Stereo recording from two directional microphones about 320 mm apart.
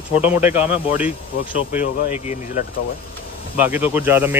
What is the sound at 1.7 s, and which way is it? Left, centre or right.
Speech, left.